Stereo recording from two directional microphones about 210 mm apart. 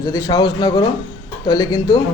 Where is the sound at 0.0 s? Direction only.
15° left (ahead or behind).